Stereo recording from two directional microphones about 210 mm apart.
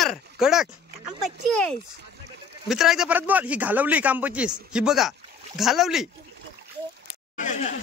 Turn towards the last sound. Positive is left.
turn(degrees=35)  # may be behind; listen again after turning